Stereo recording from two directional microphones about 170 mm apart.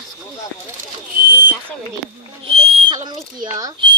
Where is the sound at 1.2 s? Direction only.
55° right (ahead or behind).